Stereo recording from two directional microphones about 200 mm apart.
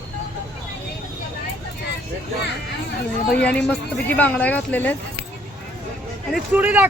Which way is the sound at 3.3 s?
5° left (ahead or behind).